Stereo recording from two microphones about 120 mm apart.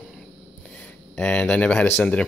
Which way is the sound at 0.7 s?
10° left (ahead or behind).